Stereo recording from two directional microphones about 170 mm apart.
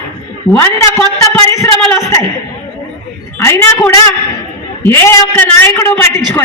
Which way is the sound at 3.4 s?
15° left (ahead or behind).